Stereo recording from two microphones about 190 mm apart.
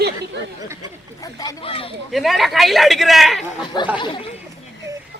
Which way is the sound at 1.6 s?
30° left (ahead or behind).